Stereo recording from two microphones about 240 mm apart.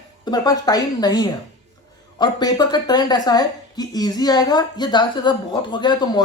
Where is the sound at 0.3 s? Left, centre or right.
Centre.